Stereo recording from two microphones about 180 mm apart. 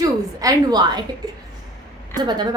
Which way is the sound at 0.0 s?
20° right (ahead or behind).